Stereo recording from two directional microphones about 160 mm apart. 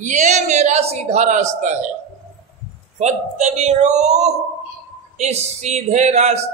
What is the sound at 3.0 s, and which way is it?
Speech, 45° right (ahead or behind).